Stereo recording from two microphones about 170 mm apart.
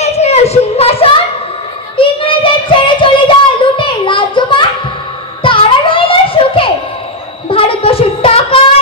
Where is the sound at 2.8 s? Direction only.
30° left (ahead or behind).